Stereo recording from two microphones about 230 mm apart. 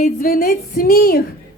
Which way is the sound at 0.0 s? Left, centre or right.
Left.